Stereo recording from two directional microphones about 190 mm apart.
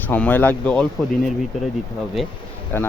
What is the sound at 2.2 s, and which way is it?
Speech, centre (ahead or behind).